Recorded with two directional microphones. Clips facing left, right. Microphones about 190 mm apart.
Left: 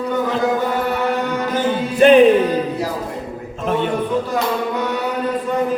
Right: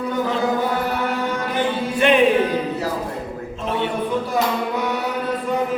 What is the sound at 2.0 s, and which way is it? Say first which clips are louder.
Music: left 7 dB; 40° left (ahead or behind).